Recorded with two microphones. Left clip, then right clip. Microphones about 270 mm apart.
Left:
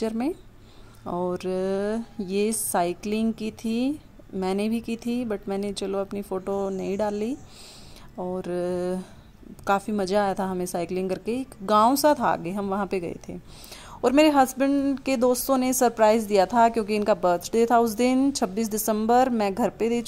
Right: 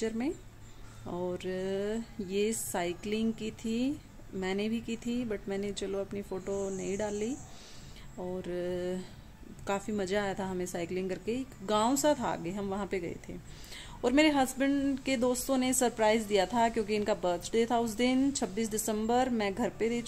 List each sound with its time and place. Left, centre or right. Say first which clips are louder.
1.0 s a woman's voice: left 8 dB; left